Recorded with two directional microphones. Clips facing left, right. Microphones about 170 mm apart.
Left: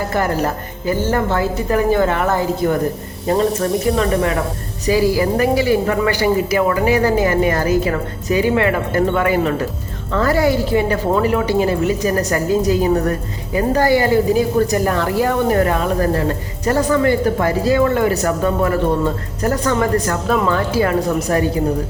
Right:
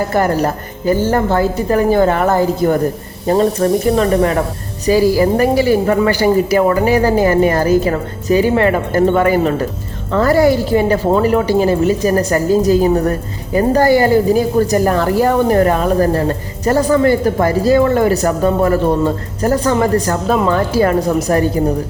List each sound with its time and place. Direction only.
0.2 s a woman's voice: 40° right (ahead or behind)